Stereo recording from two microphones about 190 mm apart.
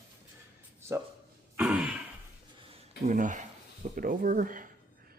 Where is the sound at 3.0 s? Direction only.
40° right (ahead or behind).